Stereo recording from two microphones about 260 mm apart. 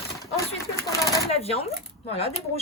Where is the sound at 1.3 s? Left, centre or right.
Left.